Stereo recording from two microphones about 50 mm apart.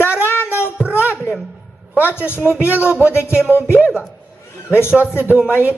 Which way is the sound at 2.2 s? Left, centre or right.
Right.